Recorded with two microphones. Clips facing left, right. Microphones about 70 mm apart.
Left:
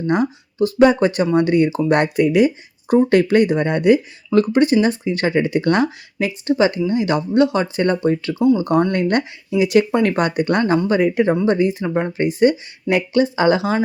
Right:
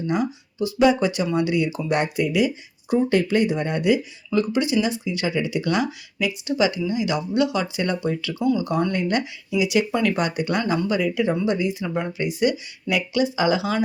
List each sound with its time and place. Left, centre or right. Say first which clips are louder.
0.1 s speech: left 6 dB; left